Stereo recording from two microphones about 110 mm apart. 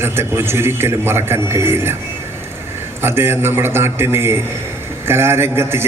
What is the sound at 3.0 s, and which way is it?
A man's voice, 20° right (ahead or behind).